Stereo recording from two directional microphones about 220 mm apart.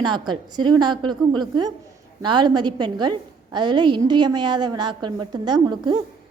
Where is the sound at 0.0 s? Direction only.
20° right (ahead or behind).